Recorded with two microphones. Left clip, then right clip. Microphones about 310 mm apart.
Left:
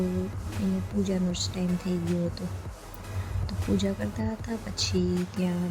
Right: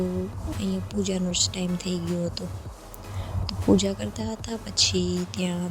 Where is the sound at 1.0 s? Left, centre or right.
Centre.